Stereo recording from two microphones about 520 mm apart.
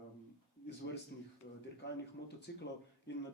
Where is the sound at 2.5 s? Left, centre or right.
Centre.